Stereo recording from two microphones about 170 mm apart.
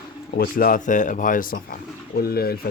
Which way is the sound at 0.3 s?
60° left (ahead or behind).